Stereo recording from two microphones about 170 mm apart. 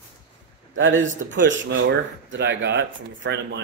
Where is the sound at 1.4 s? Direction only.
90° right.